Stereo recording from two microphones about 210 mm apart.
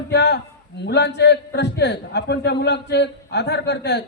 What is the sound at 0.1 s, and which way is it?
A man's voice, 55° left (ahead or behind).